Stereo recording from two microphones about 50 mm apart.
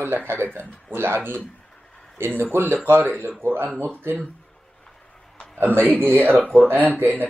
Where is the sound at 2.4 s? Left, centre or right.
Right.